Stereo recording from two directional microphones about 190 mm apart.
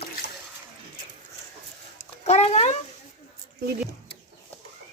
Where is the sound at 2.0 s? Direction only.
35° left (ahead or behind).